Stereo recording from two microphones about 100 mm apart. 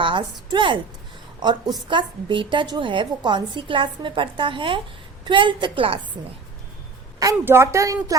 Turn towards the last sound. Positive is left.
turn(degrees=-30)  # may be behind; listen again after turning